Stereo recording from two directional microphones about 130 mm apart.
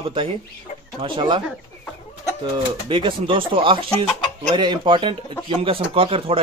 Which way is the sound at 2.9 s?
40° right (ahead or behind).